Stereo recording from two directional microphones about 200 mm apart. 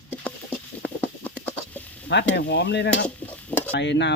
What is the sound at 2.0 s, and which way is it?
Speech, 55° left (ahead or behind).